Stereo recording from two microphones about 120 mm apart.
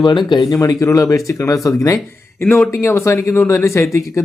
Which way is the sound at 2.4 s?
15° left (ahead or behind).